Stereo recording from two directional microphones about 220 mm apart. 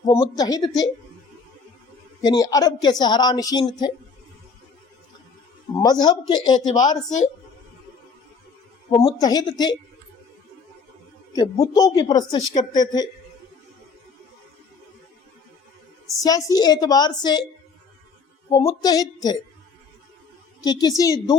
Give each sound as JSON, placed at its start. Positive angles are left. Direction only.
{"t": 0.0, "sound": "speech", "side_deg": 20}
{"t": 2.2, "sound": "speech", "side_deg": 15}
{"t": 5.8, "sound": "speech", "side_deg": 20}
{"t": 9.0, "sound": "speech", "side_deg": 20}
{"t": 11.3, "sound": "speech", "side_deg": 15}
{"t": 16.2, "sound": "speech", "side_deg": 15}
{"t": 18.5, "sound": "speech", "side_deg": 15}
{"t": 20.7, "sound": "speech", "side_deg": 15}